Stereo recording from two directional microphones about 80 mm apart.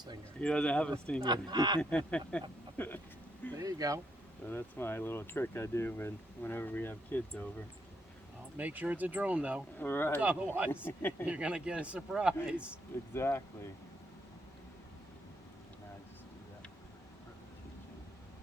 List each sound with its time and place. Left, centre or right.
0.3 s speech: centre
1.2 s speech: right
1.8 s speech: centre
2.7 s a sound: left
3.6 s speech: right
4.4 s speech: left
8.5 s speech: right
9.7 s speech: left
10.2 s a man's voice: centre
10.8 s speech: left
11.3 s a man's voice: centre
13.1 s speech: left